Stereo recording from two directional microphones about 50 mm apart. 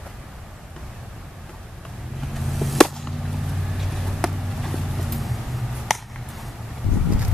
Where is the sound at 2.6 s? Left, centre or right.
Centre.